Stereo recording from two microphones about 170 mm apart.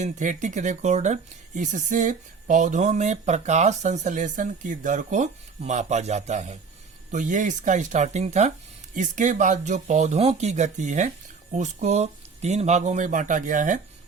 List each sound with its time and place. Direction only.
0.0 s speech: 45° right (ahead or behind)